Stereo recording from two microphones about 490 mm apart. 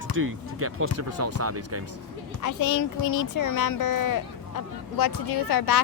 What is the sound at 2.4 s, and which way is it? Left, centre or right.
Speech, left.